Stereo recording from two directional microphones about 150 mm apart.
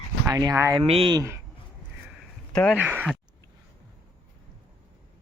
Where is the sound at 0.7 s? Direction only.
40° right (ahead or behind).